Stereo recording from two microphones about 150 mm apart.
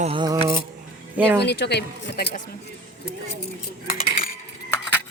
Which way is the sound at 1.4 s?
90° left.